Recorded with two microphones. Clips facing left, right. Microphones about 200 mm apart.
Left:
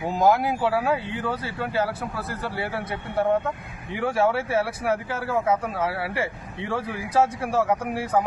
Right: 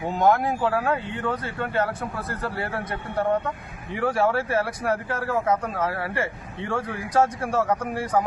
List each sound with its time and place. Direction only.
0.0 s a man's voice: 5° left (ahead or behind)